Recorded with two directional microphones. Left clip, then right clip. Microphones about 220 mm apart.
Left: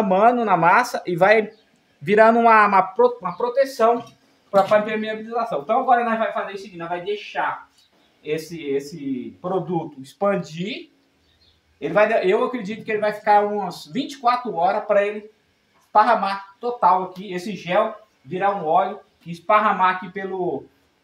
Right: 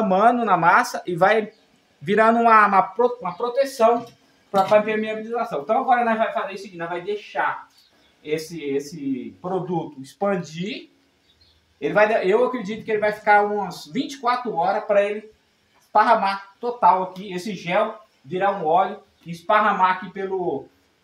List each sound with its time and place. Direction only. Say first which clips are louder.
0.0 s speech: left 1 dB; 15° left (ahead or behind)
5.3 s speech: left 1 dB; 10° left (ahead or behind)
8.3 s speech: left 1 dB; 15° left (ahead or behind)
11.8 s speech: even; 15° left (ahead or behind)
19.4 s speech: left 1 dB; 15° left (ahead or behind)